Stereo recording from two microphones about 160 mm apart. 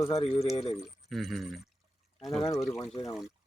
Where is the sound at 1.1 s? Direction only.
Centre (ahead or behind).